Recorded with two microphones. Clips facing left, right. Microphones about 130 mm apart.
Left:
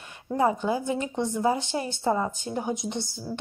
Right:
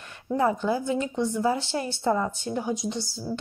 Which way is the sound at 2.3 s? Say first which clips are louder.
Right 1 dB; 45° left (ahead or behind).